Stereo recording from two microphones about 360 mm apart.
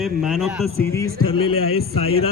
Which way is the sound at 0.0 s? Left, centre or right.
Centre.